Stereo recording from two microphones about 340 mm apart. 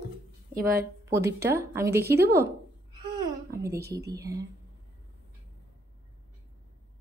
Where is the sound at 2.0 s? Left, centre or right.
Right.